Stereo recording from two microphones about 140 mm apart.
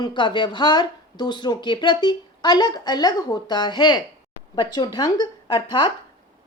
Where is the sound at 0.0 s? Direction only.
35° left (ahead or behind).